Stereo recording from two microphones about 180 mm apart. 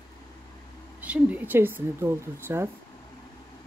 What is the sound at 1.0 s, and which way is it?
Speech, 10° right (ahead or behind).